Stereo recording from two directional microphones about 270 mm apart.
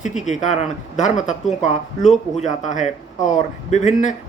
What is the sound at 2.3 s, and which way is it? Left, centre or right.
Speech, left.